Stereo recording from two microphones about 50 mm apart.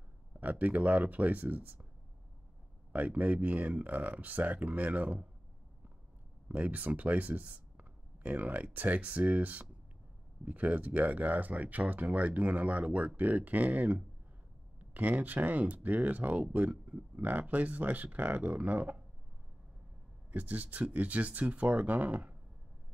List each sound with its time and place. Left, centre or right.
0.4 s speech: right
2.9 s speech: right
6.5 s speech: right
20.2 s speech: right